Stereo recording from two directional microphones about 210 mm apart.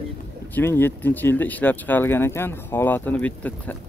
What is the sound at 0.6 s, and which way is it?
Speech, 10° left (ahead or behind).